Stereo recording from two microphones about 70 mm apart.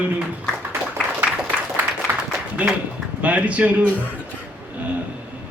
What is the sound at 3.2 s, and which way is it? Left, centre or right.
Speech, centre.